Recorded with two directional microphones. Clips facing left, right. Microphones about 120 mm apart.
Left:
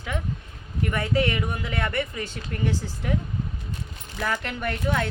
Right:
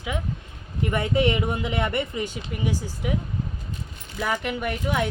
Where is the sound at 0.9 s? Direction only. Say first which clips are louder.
Right 2 dB; 20° right (ahead or behind).